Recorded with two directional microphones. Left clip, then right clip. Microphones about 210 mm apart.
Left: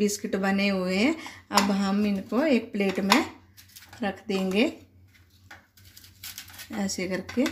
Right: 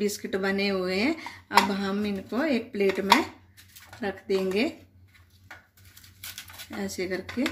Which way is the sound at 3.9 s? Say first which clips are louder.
Right 2 dB; 40° left (ahead or behind).